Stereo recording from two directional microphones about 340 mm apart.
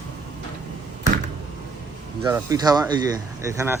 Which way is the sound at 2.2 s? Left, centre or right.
Centre.